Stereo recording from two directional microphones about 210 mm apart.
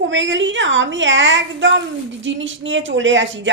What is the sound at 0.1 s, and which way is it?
A woman's voice, 60° right (ahead or behind).